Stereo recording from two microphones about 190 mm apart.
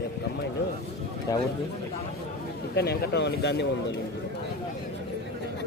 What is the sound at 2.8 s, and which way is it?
Speech, 60° left (ahead or behind).